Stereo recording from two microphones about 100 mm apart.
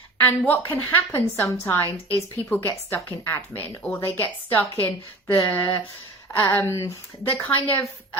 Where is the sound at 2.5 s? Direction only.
20° left (ahead or behind).